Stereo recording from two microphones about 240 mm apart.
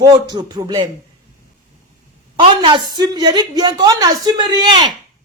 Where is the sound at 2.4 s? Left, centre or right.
Centre.